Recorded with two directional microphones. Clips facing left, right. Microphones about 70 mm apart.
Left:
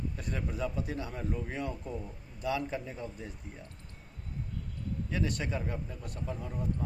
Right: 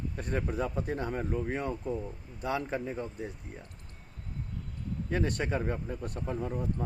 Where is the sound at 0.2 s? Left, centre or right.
Right.